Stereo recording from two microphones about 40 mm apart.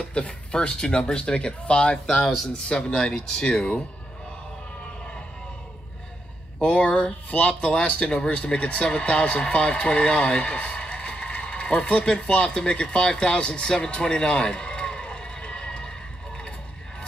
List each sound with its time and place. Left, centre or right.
0.1 s speech: left
2.2 s speech: centre
2.5 s speech: left
6.6 s speech: left
7.6 s speech: left
13.7 s a sound: left